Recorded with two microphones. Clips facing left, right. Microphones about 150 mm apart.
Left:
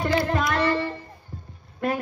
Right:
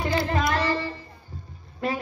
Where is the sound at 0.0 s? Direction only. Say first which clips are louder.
Left 1 dB; 55° left (ahead or behind).